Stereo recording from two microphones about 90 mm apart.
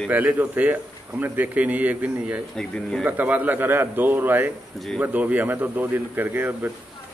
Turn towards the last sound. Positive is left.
turn(degrees=-20)  # may be behind; listen again after turning